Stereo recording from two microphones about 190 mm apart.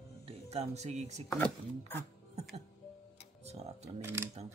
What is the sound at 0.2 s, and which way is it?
Speech, 30° right (ahead or behind).